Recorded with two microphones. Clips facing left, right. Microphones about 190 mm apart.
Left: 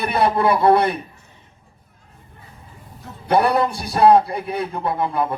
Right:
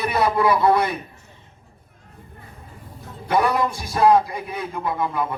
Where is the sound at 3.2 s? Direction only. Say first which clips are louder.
Left 3 dB; 35° left (ahead or behind).